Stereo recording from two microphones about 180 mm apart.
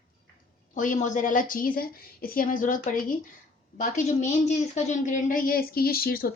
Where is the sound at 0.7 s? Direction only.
45° left (ahead or behind).